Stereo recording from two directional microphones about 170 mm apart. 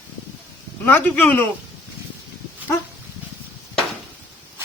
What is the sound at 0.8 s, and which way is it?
Speech, 10° left (ahead or behind).